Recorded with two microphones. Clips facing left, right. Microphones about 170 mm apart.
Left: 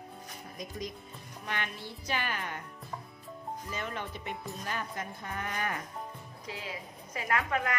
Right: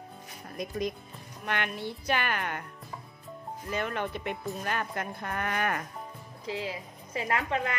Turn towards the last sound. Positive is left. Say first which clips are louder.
# right 1 dB
turn(degrees=-25)  # may be behind; listen again after turning